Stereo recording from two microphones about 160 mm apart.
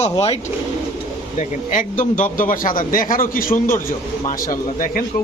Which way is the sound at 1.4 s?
50° left (ahead or behind).